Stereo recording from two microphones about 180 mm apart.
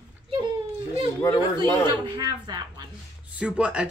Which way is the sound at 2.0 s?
20° right (ahead or behind).